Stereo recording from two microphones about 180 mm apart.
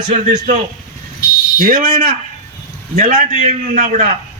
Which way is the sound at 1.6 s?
50° right (ahead or behind).